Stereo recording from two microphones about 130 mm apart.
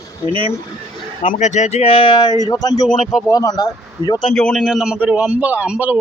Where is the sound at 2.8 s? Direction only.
Centre (ahead or behind).